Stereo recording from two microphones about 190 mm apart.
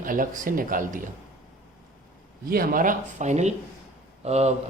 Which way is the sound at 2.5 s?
50° right (ahead or behind).